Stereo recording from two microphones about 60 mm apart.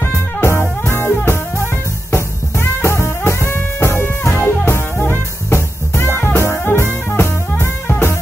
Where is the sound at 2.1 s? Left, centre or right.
Left.